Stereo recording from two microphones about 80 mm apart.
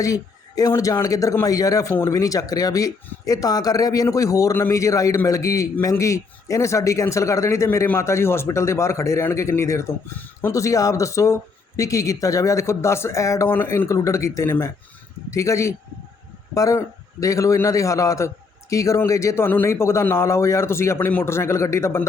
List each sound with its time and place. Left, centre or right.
0.0 s a man's voice: left
1.9 s speech: left
2.1 s a man's voice: left